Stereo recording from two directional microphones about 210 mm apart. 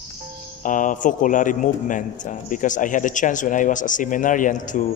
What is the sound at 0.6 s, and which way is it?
A man's voice, 40° left (ahead or behind).